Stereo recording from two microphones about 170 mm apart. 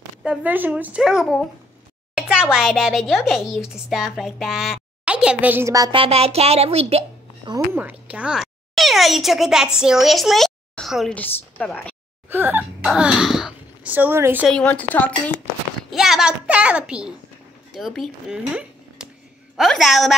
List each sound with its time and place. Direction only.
0.2 s a woman's voice: 5° right (ahead or behind); by 7.5 s 35° right (ahead or behind)
7.5 s a child's voice: 10° right (ahead or behind); by 11.9 s 5° left (ahead or behind)
12.3 s speech: 10° right (ahead or behind)
14.5 s a woman's voice: 10° left (ahead or behind)
15.9 s speech: centre (ahead or behind)